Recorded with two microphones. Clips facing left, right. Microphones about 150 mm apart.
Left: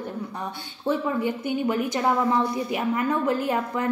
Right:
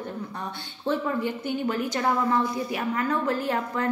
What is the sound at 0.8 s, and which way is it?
A woman's voice, 15° left (ahead or behind).